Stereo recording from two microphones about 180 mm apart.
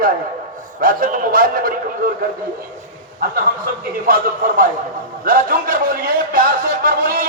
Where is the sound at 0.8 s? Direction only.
50° right (ahead or behind).